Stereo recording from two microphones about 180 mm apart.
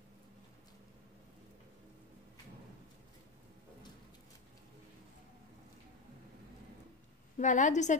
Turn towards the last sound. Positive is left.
turn(degrees=40)  # may be behind; listen again after turning